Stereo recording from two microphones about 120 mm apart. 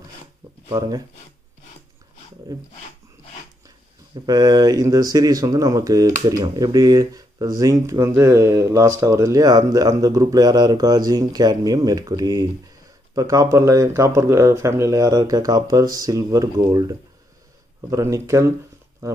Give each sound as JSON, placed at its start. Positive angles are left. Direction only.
{"t": 0.7, "sound": "speech", "side_deg": -30}
{"t": 4.3, "sound": "speech", "side_deg": -30}